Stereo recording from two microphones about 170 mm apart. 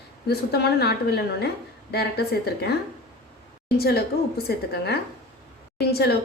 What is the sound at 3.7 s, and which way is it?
A woman's voice, 65° left (ahead or behind).